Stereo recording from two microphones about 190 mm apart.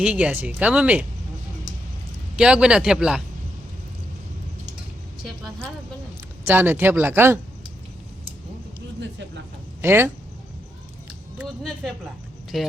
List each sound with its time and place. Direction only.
0.0 s speech: 5° right (ahead or behind)
2.3 s a man's voice: 5° right (ahead or behind)
6.4 s speech: 10° right (ahead or behind)
9.0 s speech: 70° right (ahead or behind)
9.8 s speech: 10° right (ahead or behind)
11.3 s a man's voice: 5° right (ahead or behind)